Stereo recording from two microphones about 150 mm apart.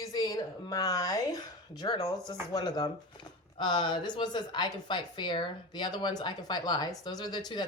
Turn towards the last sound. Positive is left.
turn(degrees=30)  # may be behind; listen again after turning